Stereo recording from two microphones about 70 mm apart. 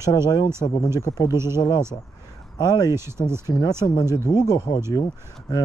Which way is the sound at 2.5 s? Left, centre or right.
Left.